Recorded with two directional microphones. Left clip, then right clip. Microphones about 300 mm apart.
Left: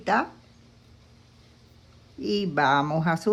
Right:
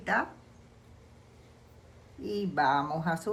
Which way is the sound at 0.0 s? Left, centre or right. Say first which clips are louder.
Left 5 dB; centre.